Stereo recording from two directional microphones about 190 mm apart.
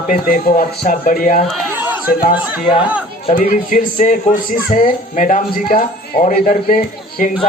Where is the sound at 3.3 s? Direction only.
45° left (ahead or behind).